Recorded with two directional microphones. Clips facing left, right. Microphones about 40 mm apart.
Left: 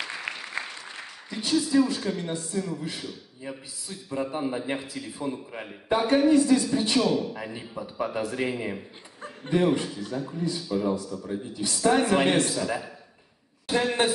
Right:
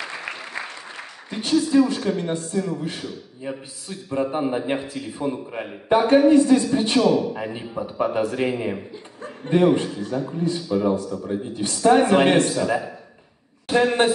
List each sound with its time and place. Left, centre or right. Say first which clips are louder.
0.3 s applause: right 2 dB; centre
1.3 s a man's voice: right 5 dB; right
7.3 s a man's voice: right 7 dB; right